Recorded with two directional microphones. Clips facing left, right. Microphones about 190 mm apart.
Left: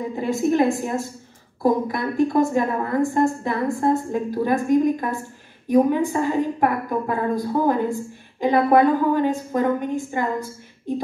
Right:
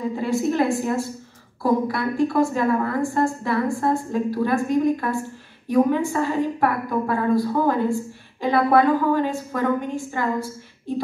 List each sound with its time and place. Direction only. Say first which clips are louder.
0.1 s a woman's voice: left 4 dB; 20° left (ahead or behind)